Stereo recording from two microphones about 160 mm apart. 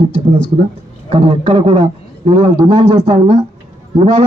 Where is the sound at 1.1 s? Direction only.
35° right (ahead or behind).